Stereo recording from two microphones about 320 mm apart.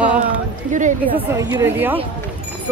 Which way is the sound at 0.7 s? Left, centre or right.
Right.